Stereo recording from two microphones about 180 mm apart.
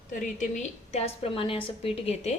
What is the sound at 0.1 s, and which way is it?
A woman's voice, 45° left (ahead or behind).